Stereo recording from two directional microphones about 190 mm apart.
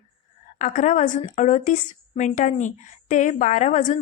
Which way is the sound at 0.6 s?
40° left (ahead or behind).